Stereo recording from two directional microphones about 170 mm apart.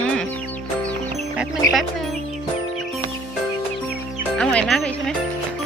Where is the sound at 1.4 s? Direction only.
Centre (ahead or behind).